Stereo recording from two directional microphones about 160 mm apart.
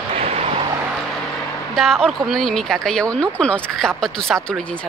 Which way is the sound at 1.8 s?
5° left (ahead or behind).